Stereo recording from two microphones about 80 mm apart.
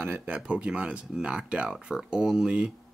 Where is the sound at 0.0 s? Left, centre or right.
Right.